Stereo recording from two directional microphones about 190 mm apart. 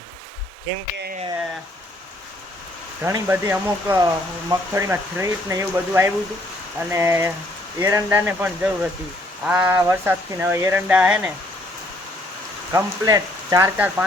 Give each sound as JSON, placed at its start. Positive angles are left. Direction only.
{"t": 0.7, "sound": "speech", "side_deg": -65}
{"t": 3.0, "sound": "speech", "side_deg": -15}
{"t": 12.7, "sound": "speech", "side_deg": -15}